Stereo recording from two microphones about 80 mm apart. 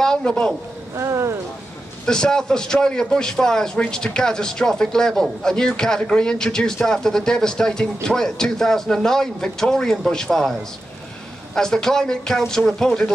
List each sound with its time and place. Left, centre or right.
0.0 s a man's voice: centre
0.9 s a sound: right
2.0 s a man's voice: centre